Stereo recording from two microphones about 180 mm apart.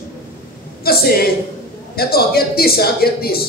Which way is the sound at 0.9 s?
55° left (ahead or behind).